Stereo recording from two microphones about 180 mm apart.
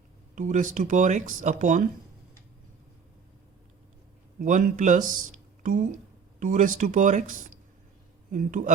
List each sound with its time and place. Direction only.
0.3 s speech: 45° right (ahead or behind)
4.4 s speech: 45° right (ahead or behind)